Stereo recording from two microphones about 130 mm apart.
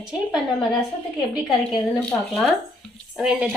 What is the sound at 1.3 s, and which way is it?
Speech, centre (ahead or behind).